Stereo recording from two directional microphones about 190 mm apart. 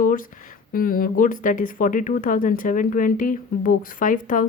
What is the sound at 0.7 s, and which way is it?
Speech, 50° left (ahead or behind).